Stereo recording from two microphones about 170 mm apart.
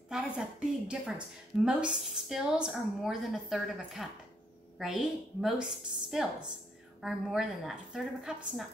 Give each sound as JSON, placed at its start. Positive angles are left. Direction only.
{"t": 0.1, "sound": "a woman's voice", "side_deg": -5}